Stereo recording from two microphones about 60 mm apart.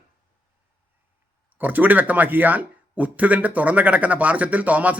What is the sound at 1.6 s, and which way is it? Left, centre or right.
A man's voice, right.